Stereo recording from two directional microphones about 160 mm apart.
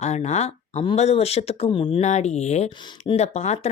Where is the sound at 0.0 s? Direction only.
45° left (ahead or behind).